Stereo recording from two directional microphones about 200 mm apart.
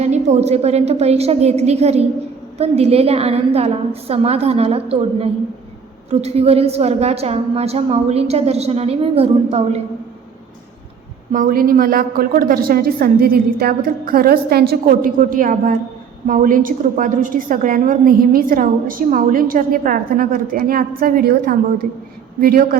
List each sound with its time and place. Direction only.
0.0 s a woman's voice: 35° right (ahead or behind)
11.3 s a woman's voice: 40° right (ahead or behind)